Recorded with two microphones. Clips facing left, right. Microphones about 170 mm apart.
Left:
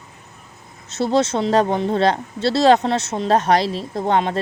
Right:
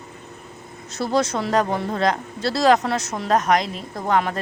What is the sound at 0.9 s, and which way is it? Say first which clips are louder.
Speech: left 3 dB; 25° left (ahead or behind).